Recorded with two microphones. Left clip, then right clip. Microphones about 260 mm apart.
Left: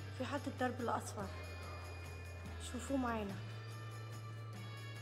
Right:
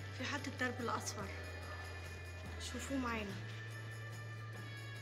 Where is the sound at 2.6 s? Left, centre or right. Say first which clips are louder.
Left 2 dB; left.